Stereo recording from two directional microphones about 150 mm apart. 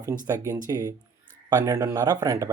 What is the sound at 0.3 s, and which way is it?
Speech, 20° right (ahead or behind).